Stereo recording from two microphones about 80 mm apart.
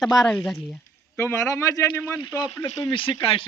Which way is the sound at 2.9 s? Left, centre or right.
Left.